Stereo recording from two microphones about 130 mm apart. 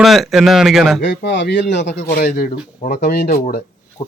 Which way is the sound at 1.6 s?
70° left (ahead or behind).